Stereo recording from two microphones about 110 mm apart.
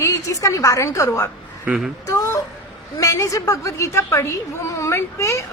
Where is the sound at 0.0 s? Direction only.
30° left (ahead or behind).